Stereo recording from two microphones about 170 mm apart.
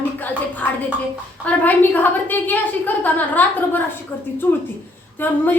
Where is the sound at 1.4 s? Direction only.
10° left (ahead or behind).